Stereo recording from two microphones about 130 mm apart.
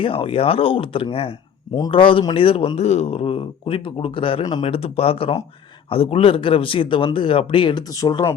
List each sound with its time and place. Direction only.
0.0 s a man's voice: 45° left (ahead or behind); by 8.4 s 30° left (ahead or behind)